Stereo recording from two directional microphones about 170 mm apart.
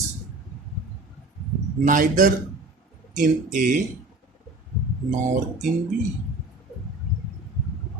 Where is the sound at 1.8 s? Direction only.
50° right (ahead or behind).